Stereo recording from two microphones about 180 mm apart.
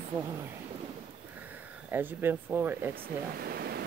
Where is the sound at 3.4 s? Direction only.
60° right (ahead or behind).